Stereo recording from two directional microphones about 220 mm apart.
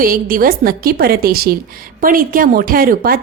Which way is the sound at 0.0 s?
40° right (ahead or behind).